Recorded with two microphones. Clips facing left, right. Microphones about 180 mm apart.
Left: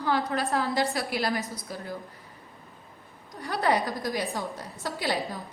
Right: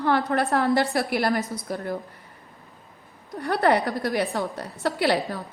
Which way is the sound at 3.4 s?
60° right (ahead or behind).